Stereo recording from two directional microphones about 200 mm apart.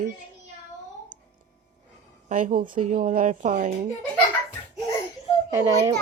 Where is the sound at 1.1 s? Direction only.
45° right (ahead or behind).